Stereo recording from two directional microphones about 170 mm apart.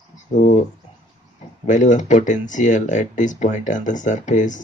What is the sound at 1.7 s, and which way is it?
Speech, 45° left (ahead or behind).